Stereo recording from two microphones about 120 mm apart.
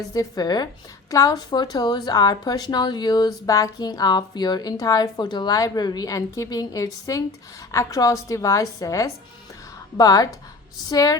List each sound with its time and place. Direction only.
0.1 s a woman's voice: 30° left (ahead or behind)